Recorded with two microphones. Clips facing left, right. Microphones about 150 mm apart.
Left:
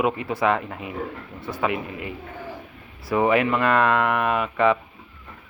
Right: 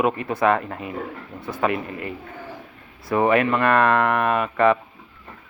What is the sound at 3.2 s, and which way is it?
Speech, 15° left (ahead or behind).